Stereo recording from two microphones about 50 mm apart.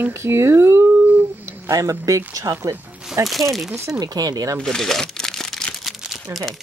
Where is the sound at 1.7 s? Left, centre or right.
Right.